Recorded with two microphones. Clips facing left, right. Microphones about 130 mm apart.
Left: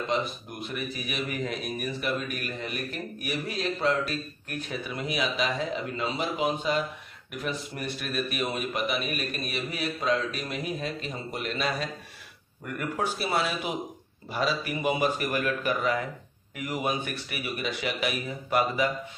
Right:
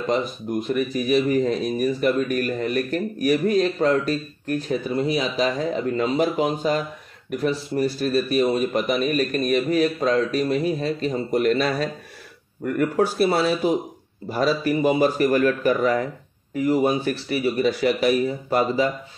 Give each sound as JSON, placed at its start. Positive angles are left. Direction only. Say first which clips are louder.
{"t": 0.1, "sound": "speech", "louder": "right 10 dB", "side_deg": -40}